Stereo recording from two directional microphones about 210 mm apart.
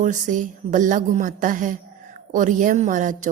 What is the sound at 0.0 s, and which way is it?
A woman's voice, 35° right (ahead or behind).